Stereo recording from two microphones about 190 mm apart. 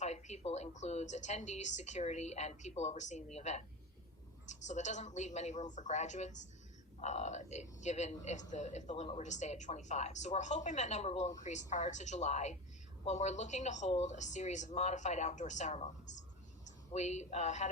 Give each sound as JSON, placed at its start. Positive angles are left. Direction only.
{"t": 0.0, "sound": "speech", "side_deg": 35}